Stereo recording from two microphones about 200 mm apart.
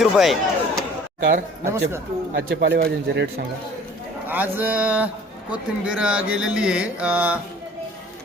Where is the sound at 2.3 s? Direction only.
60° right (ahead or behind).